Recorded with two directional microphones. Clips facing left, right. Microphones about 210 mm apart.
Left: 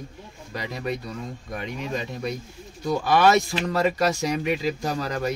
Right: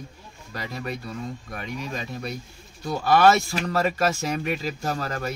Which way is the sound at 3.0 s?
15° left (ahead or behind).